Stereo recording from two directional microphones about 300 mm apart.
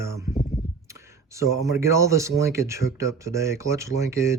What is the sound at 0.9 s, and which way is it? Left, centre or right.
Speech, centre.